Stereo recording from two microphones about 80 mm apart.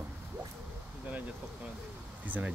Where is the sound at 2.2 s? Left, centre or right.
Right.